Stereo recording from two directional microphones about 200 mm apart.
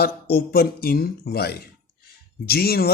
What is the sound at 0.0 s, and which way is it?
Speech, 50° left (ahead or behind).